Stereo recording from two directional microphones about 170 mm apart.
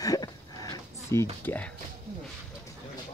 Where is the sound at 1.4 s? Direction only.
10° left (ahead or behind).